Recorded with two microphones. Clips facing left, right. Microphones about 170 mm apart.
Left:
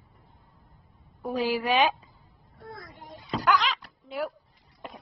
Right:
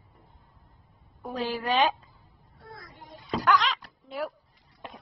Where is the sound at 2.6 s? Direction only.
60° left (ahead or behind).